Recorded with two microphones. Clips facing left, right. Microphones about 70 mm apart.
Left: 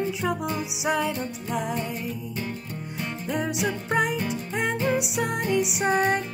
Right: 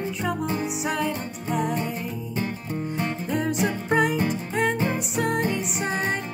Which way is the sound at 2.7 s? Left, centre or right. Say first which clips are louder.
Right 6 dB; right.